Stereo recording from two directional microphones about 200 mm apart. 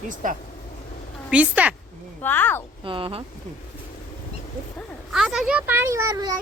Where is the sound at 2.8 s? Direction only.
25° right (ahead or behind).